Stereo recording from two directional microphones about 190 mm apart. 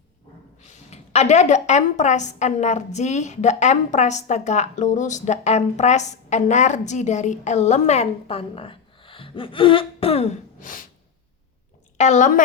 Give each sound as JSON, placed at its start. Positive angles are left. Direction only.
{"t": 0.6, "sound": "a woman's voice", "side_deg": 35}
{"t": 11.9, "sound": "a woman's voice", "side_deg": 40}